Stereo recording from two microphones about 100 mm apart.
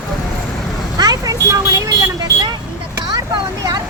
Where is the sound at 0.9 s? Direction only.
40° right (ahead or behind).